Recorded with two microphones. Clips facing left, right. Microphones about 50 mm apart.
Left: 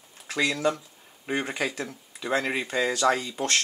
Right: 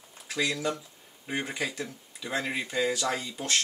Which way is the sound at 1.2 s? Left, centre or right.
Left.